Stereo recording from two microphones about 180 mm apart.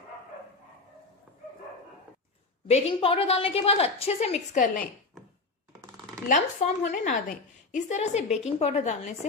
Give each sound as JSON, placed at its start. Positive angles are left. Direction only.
{"t": 2.6, "sound": "a woman's voice", "side_deg": 35}
{"t": 6.2, "sound": "a woman's voice", "side_deg": 45}